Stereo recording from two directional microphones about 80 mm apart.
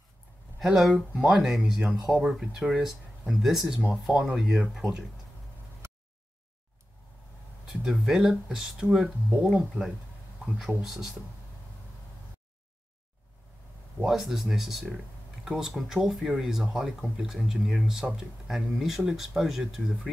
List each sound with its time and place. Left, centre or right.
0.7 s speech: centre
2.0 s speech: centre
4.7 s speech: centre
7.6 s speech: centre
13.9 s speech: centre